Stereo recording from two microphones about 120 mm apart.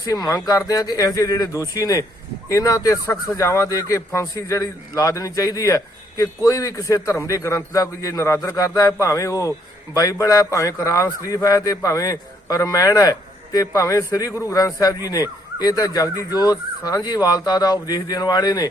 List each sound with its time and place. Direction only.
0.1 s speech: 35° left (ahead or behind)